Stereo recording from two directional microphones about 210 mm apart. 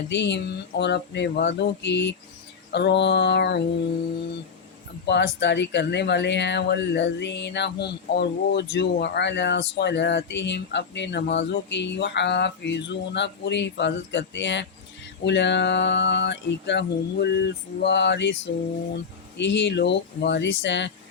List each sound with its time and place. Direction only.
0.1 s speech: 55° left (ahead or behind)
5.0 s speech: 55° left (ahead or behind)
19.4 s speech: 55° left (ahead or behind)